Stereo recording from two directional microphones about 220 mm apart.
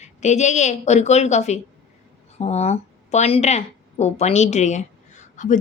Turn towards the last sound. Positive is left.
turn(degrees=35)  # may be behind; listen again after turning